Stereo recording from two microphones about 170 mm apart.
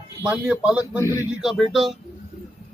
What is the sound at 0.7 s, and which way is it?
Speech, 20° left (ahead or behind).